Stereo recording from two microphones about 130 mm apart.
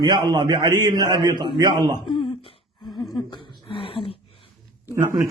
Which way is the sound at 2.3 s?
45° left (ahead or behind).